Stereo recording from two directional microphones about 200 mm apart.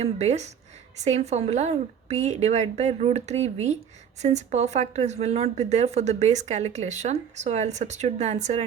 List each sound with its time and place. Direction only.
0.0 s speech: 35° right (ahead or behind)